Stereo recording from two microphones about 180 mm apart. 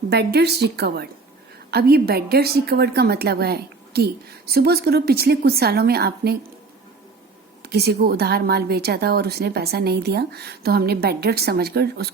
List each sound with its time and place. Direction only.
0.1 s a woman's voice: 65° right (ahead or behind)
7.6 s a woman's voice: 60° right (ahead or behind)